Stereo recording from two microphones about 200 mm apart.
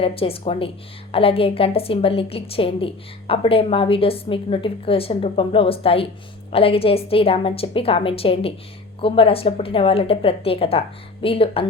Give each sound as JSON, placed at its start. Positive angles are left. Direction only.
{"t": 0.0, "sound": "a woman's voice", "side_deg": 30}